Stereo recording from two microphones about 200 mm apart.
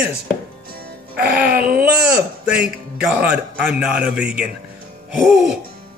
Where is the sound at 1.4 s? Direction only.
50° right (ahead or behind).